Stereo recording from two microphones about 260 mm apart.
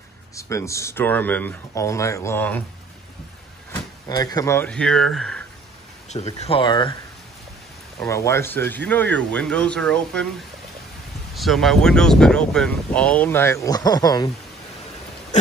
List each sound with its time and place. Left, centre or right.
0.4 s speech: centre
3.7 s speech: centre
6.0 s speech: left
8.0 s speech: centre
11.3 s speech: centre